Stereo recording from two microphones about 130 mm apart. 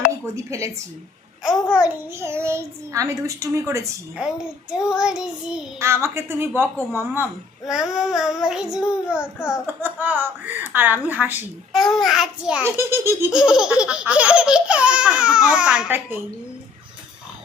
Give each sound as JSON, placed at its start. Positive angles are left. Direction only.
{"t": 1.5, "sound": "a child's voice", "side_deg": -5}
{"t": 4.9, "sound": "a child's voice", "side_deg": -5}
{"t": 5.8, "sound": "a child's voice", "side_deg": -20}
{"t": 6.6, "sound": "child singing", "side_deg": -20}
{"t": 7.7, "sound": "child singing", "side_deg": -5}
{"t": 11.7, "sound": "a child's voice", "side_deg": 0}
{"t": 12.6, "sound": "a child's voice", "side_deg": -20}
{"t": 13.3, "sound": "child singing", "side_deg": -5}